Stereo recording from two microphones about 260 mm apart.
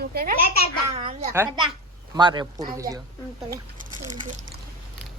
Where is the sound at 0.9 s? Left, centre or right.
Right.